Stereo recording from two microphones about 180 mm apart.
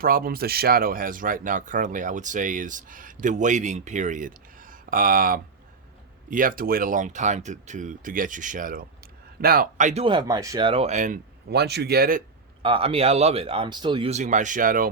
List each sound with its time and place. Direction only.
0.0 s speech: 55° right (ahead or behind)
11.5 s speech: 65° right (ahead or behind)
12.6 s speech: 30° right (ahead or behind)
14.1 s speech: 40° right (ahead or behind)